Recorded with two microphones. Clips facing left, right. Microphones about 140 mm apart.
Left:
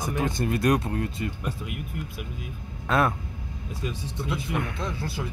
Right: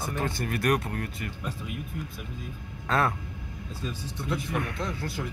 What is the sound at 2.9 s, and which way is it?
Speech, 15° left (ahead or behind).